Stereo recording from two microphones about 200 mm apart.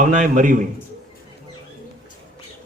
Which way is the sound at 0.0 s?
40° right (ahead or behind).